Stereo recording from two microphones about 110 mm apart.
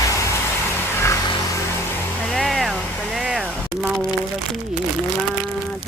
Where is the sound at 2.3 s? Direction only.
Centre (ahead or behind).